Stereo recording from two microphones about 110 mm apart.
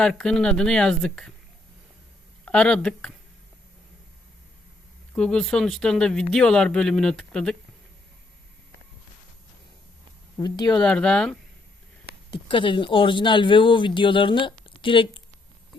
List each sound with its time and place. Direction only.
0.0 s speech: 5° left (ahead or behind)
2.4 s speech: 10° left (ahead or behind)
5.1 s speech: 5° left (ahead or behind)
10.3 s speech: 35° left (ahead or behind)
10.8 s speech: 5° left (ahead or behind)
12.3 s speech: 50° left (ahead or behind)